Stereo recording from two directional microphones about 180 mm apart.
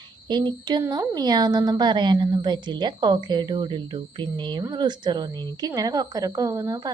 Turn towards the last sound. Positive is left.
turn(degrees=-20)  # may be behind; listen again after turning